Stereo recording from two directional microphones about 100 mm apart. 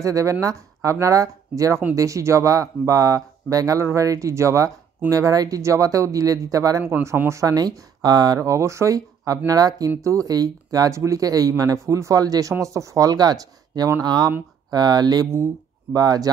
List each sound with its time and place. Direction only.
0.0 s speech: 30° right (ahead or behind)
6.8 s speech: 25° right (ahead or behind); by 15.2 s 40° right (ahead or behind)
15.3 s speech: 25° right (ahead or behind)
16.0 s speech: 40° right (ahead or behind)